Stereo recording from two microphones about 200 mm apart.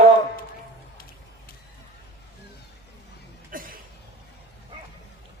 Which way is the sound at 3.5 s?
45° right (ahead or behind).